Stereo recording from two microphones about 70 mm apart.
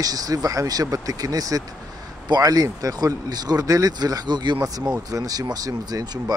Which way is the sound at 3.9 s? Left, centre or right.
Right.